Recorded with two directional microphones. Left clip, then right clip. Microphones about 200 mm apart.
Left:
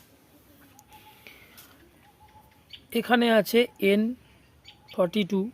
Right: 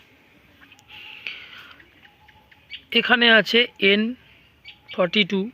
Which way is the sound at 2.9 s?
Centre (ahead or behind).